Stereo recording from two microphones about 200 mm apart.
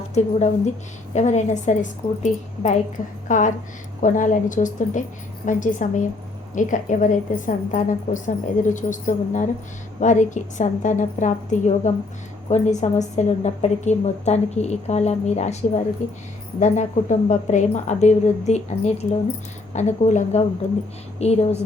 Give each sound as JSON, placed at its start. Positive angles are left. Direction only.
{"t": 0.1, "sound": "a woman's voice", "side_deg": 35}